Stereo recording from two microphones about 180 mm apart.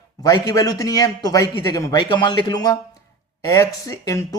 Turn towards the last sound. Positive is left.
turn(degrees=20)  # may be behind; listen again after turning